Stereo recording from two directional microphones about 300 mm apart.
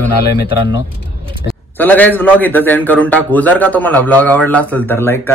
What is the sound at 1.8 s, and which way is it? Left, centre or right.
A man's voice, centre.